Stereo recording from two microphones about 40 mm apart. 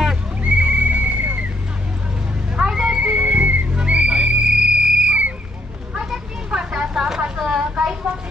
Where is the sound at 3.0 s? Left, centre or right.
Right.